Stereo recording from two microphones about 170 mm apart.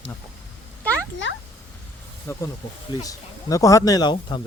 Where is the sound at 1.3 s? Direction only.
90° left.